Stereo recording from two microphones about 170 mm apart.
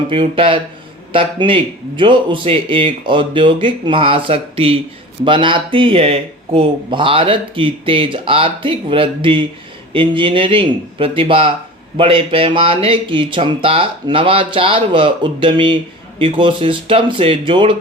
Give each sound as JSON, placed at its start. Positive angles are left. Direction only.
{"t": 0.1, "sound": "speech", "side_deg": -30}